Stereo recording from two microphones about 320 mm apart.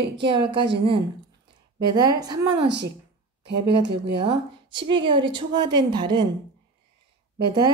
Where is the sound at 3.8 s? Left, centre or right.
Centre.